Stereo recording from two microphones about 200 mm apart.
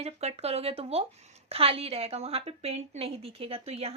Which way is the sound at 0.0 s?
30° right (ahead or behind).